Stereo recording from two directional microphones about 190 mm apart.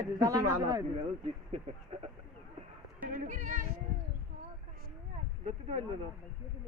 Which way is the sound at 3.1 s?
45° right (ahead or behind).